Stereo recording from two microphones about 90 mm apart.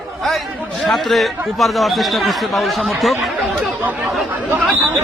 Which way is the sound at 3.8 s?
15° right (ahead or behind).